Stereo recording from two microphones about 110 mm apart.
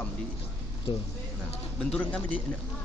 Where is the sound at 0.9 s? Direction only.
50° left (ahead or behind).